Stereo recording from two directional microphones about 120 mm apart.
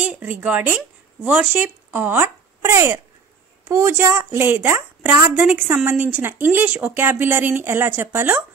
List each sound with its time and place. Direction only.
0.0 s speech: 15° right (ahead or behind)